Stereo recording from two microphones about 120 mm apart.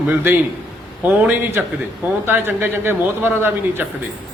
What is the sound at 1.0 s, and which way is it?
Speech, 15° right (ahead or behind).